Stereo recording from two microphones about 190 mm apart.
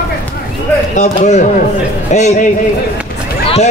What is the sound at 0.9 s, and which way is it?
A man's voice, 40° left (ahead or behind).